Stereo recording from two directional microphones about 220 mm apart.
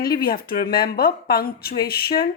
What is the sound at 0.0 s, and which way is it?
A woman's voice, 45° left (ahead or behind).